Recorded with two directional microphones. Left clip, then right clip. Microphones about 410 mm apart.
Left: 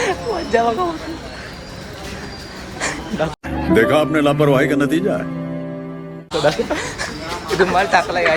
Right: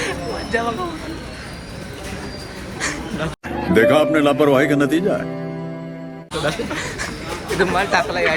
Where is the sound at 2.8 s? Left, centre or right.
Centre.